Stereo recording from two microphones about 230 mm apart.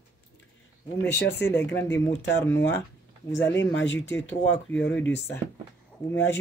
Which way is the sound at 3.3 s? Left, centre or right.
Centre.